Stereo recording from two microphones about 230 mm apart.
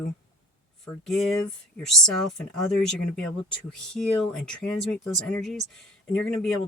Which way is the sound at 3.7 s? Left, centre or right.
Centre.